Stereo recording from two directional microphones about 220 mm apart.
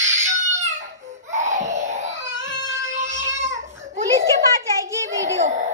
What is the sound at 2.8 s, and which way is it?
Music, 35° right (ahead or behind).